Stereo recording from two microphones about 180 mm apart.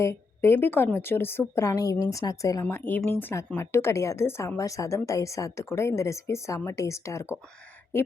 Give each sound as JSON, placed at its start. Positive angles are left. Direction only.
{"t": 0.0, "sound": "a woman's voice", "side_deg": 15}